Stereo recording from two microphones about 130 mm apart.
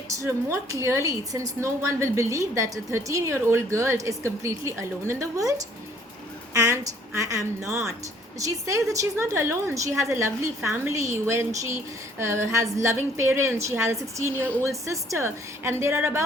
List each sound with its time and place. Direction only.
0.1 s a woman's voice: 20° right (ahead or behind)